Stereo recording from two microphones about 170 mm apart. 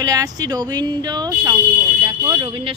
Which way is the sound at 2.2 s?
20° right (ahead or behind).